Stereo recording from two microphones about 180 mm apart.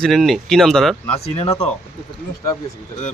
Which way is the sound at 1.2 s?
35° left (ahead or behind).